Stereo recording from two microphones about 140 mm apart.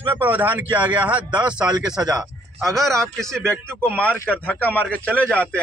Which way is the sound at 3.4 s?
15° right (ahead or behind).